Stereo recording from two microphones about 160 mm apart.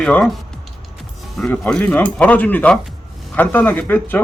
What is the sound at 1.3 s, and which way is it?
Speech, 5° left (ahead or behind).